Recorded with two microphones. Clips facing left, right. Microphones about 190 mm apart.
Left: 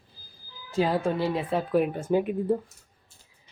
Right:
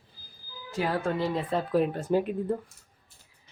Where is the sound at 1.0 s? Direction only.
10° left (ahead or behind).